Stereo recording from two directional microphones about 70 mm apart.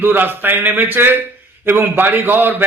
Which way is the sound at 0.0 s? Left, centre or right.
Right.